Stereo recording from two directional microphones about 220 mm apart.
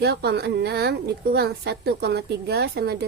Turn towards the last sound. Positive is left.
turn(degrees=-50)  # may be behind; listen again after turning